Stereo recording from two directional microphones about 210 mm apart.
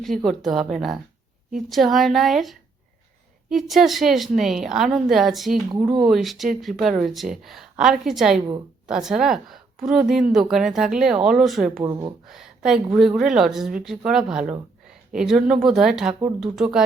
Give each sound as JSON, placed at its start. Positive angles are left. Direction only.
{"t": 0.0, "sound": "a woman's voice", "side_deg": 0}
{"t": 5.6, "sound": "speech", "side_deg": -15}
{"t": 6.1, "sound": "a woman's voice", "side_deg": 0}
{"t": 11.8, "sound": "speech", "side_deg": -15}
{"t": 12.2, "sound": "a woman's voice", "side_deg": 0}